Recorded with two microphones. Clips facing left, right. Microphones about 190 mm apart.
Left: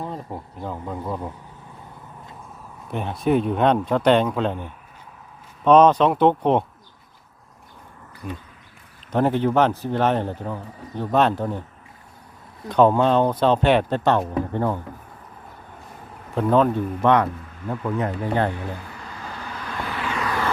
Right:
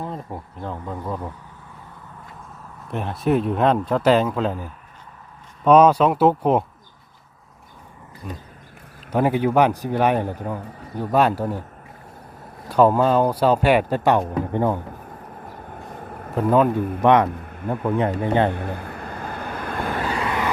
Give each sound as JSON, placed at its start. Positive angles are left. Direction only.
{"t": 0.0, "sound": "speech", "side_deg": 0}
{"t": 2.9, "sound": "speech", "side_deg": 0}
{"t": 8.2, "sound": "speech", "side_deg": 0}
{"t": 9.1, "sound": "a man's voice", "side_deg": -10}
{"t": 12.6, "sound": "a man's voice", "side_deg": -5}
{"t": 15.7, "sound": "vehicle", "side_deg": -55}
{"t": 16.3, "sound": "a man's voice", "side_deg": -5}
{"t": 17.4, "sound": "a sound", "side_deg": -55}
{"t": 17.8, "sound": "speech", "side_deg": -30}
{"t": 18.4, "sound": "vehicle", "side_deg": -55}
{"t": 20.2, "sound": "vehicle", "side_deg": -20}